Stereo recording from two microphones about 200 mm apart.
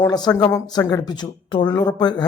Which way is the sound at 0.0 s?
20° left (ahead or behind).